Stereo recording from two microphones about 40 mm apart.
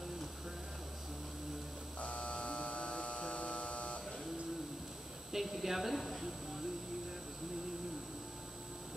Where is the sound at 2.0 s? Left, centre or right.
Left.